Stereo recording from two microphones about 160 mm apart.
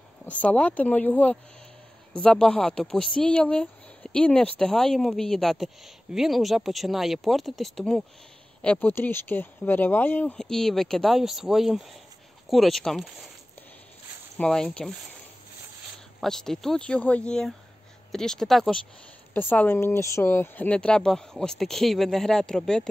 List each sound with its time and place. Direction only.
0.3 s speech: 10° left (ahead or behind)
14.4 s speech: 5° left (ahead or behind)
16.2 s speech: 5° left (ahead or behind)